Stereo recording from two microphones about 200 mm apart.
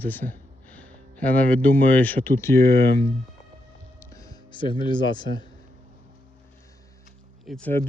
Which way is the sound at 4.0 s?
15° left (ahead or behind).